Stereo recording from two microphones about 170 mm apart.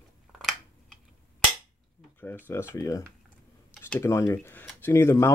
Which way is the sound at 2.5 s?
15° left (ahead or behind).